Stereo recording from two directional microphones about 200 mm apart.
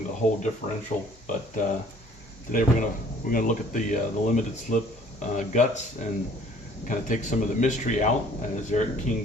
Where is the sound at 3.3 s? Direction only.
40° left (ahead or behind).